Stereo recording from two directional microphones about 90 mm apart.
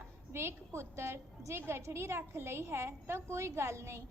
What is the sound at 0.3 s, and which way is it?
A woman's voice, 30° right (ahead or behind).